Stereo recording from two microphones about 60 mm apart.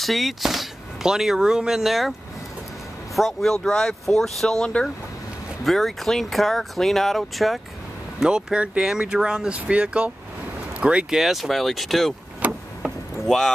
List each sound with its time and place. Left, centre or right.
0.0 s speech: centre
3.2 s speech: centre
5.6 s speech: centre
8.2 s speech: centre
11.1 s speech: centre
12.4 s a sound: right
13.3 s speech: centre